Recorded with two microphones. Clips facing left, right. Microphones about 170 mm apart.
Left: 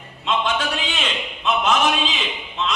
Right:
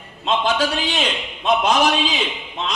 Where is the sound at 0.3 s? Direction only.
35° right (ahead or behind).